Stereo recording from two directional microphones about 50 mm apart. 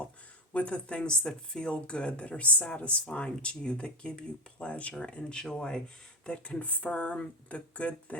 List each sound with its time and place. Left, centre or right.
0.5 s speech: left